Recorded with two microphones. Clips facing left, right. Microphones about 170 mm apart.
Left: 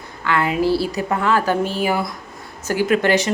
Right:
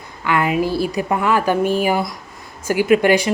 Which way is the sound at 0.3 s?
15° right (ahead or behind).